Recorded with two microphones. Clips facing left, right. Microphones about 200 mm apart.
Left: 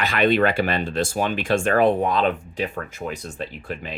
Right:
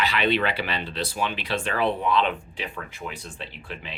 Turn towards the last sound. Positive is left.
turn(degrees=45)  # may be behind; listen again after turning